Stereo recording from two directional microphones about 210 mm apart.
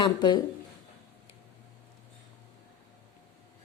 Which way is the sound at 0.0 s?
20° left (ahead or behind).